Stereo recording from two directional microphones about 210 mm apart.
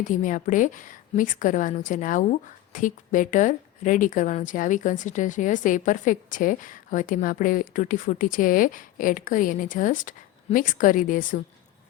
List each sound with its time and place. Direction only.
0.1 s a woman's voice: 40° left (ahead or behind)